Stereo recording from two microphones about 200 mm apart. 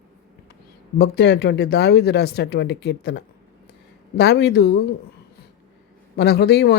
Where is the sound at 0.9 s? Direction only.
55° left (ahead or behind).